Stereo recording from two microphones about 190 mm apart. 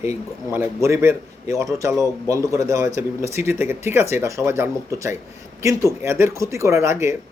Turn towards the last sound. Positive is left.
turn(degrees=-15)  # may be behind; listen again after turning